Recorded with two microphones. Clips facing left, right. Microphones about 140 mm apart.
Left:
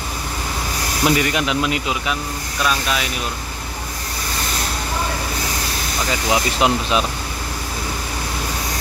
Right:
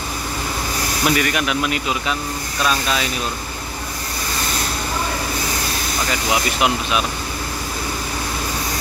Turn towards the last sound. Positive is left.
turn(degrees=30)  # may be behind; listen again after turning